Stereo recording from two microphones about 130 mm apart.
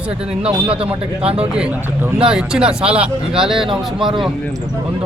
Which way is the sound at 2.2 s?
5° right (ahead or behind).